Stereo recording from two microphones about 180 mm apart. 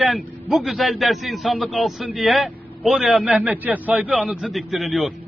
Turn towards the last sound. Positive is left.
turn(degrees=0)  # may be behind; listen again after turning